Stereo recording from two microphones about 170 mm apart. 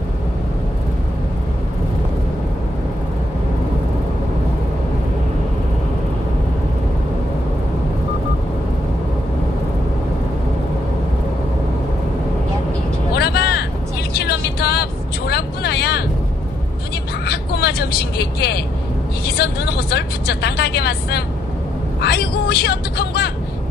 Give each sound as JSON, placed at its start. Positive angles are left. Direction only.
{"t": 13.1, "sound": "vehicle", "side_deg": 70}
{"t": 17.3, "sound": "vehicle", "side_deg": 70}